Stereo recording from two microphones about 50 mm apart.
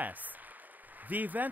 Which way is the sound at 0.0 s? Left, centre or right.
Right.